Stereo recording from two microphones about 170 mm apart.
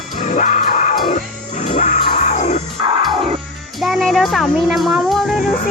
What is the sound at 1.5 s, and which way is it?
Music, 45° left (ahead or behind).